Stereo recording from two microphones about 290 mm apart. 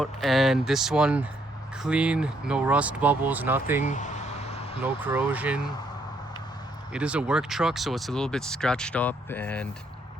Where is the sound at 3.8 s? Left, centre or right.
Left.